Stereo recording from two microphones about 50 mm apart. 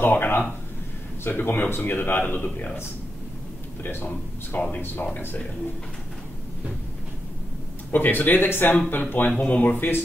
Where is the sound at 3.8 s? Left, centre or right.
Left.